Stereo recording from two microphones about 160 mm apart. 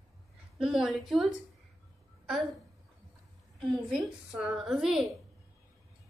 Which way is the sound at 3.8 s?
Centre (ahead or behind).